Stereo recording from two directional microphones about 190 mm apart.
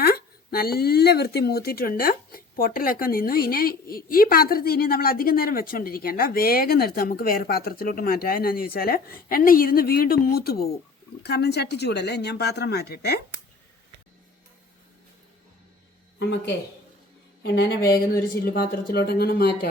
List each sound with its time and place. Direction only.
0.0 s speech: 55° left (ahead or behind)
16.1 s speech: 65° left (ahead or behind)
17.4 s a woman's voice: 80° left
17.7 s speech: 50° left (ahead or behind)